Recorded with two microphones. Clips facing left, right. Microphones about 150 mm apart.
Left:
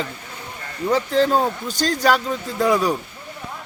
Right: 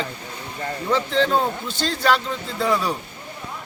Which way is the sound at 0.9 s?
40° left (ahead or behind).